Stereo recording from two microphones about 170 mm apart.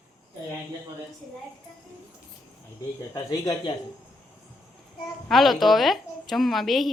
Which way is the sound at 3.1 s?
20° left (ahead or behind).